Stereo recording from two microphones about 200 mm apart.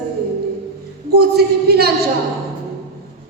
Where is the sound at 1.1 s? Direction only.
55° right (ahead or behind).